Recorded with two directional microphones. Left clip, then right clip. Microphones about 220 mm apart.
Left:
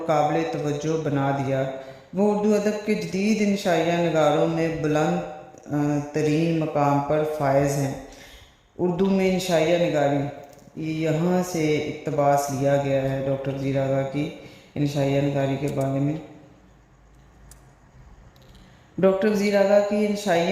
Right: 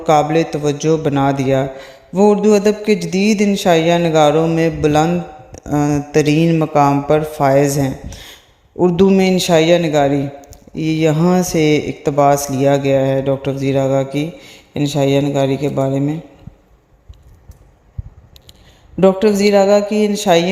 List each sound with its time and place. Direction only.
0.0 s a man's voice: 35° right (ahead or behind)
8.8 s a man's voice: 35° right (ahead or behind)
18.9 s a man's voice: 35° right (ahead or behind)